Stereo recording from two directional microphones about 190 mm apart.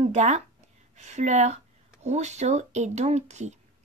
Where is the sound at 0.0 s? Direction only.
40° right (ahead or behind).